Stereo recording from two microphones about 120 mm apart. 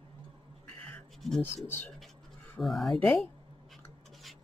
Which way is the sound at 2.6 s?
Centre (ahead or behind).